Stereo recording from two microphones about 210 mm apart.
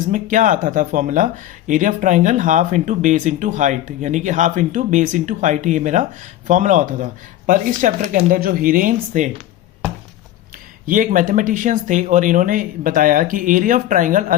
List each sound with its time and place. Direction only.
0.1 s speech: 40° right (ahead or behind)
10.8 s speech: 40° right (ahead or behind)